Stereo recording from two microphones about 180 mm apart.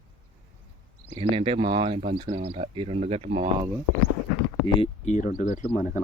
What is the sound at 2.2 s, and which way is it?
Speech, 35° right (ahead or behind).